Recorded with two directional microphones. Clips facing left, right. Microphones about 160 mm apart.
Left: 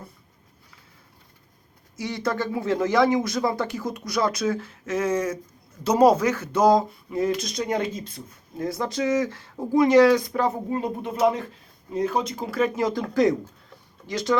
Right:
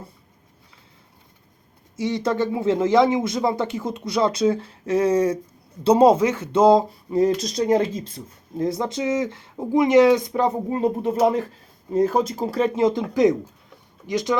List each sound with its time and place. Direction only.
2.0 s speech: 25° right (ahead or behind)